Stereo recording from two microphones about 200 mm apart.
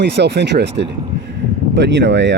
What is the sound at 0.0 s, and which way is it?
A man's voice, 60° right (ahead or behind).